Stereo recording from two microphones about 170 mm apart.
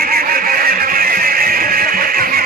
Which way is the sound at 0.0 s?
60° right (ahead or behind).